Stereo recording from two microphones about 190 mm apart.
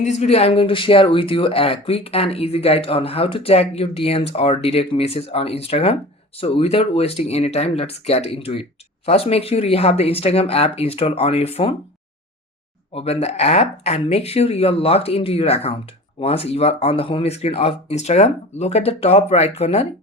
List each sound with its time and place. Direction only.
0.0 s speech: 35° left (ahead or behind)
12.9 s speech: 30° left (ahead or behind)